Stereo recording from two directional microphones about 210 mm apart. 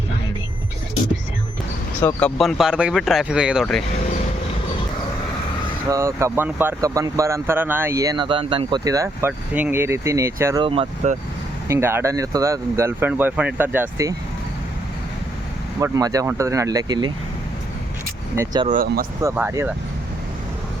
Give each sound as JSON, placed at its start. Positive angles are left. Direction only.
{"t": 2.0, "sound": "speech", "side_deg": 10}
{"t": 5.9, "sound": "speech", "side_deg": -15}
{"t": 10.6, "sound": "speech", "side_deg": -25}
{"t": 11.7, "sound": "speech", "side_deg": -10}
{"t": 15.8, "sound": "speech", "side_deg": -15}
{"t": 18.3, "sound": "speech", "side_deg": -20}
{"t": 18.7, "sound": "speech", "side_deg": -45}
{"t": 19.2, "sound": "speech", "side_deg": -10}